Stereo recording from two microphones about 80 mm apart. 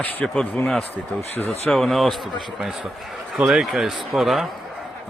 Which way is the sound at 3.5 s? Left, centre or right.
Centre.